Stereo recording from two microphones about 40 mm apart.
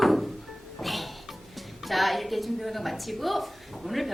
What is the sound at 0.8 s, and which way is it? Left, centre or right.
A woman's voice, centre.